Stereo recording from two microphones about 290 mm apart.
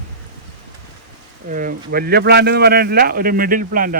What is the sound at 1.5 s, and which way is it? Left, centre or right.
A man's voice, right.